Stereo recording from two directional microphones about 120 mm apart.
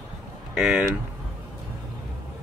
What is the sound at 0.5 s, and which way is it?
Speech, 5° right (ahead or behind).